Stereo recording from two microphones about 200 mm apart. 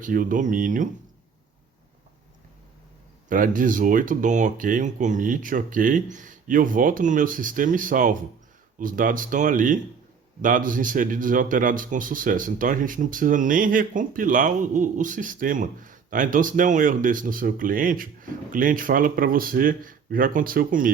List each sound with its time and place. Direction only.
0.0 s speech: 45° right (ahead or behind)
3.2 s speech: 40° right (ahead or behind)